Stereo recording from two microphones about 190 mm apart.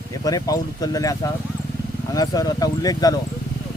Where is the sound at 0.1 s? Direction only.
20° left (ahead or behind).